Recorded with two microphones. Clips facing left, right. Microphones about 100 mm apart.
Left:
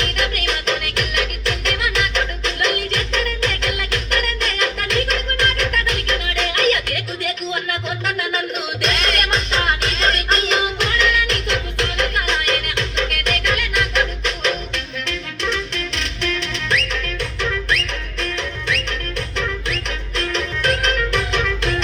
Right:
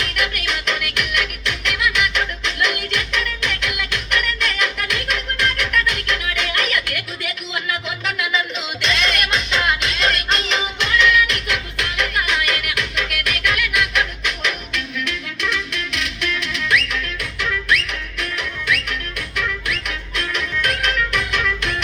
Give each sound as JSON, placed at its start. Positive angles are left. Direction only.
{"t": 0.0, "sound": "music", "side_deg": 30}
{"t": 18.2, "sound": "music", "side_deg": 30}